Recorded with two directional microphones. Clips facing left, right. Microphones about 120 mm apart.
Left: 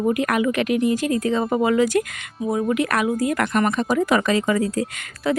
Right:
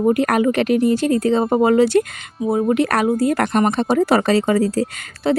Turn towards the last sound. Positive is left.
turn(degrees=-30)  # may be behind; listen again after turning